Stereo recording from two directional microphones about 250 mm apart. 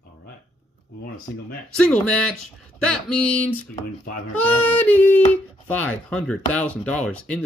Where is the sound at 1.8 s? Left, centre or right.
Centre.